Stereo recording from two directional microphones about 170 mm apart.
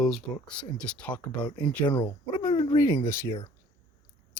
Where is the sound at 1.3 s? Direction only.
25° left (ahead or behind).